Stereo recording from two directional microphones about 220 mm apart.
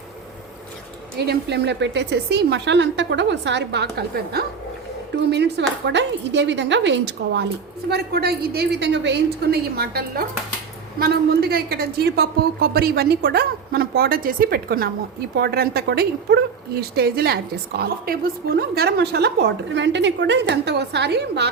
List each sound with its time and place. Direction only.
1.2 s a woman's voice: 50° right (ahead or behind)